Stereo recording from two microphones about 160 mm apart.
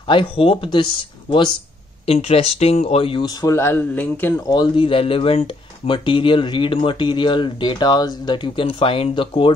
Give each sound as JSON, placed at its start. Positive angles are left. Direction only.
{"t": 0.1, "sound": "speech", "side_deg": 35}
{"t": 3.4, "sound": "a man's voice", "side_deg": 15}
{"t": 4.5, "sound": "speech", "side_deg": 30}